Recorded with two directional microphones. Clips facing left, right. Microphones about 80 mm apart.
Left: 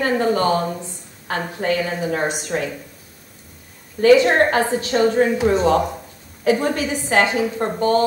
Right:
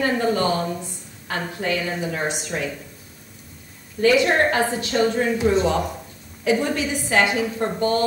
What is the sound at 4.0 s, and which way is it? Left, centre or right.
A woman's voice, left.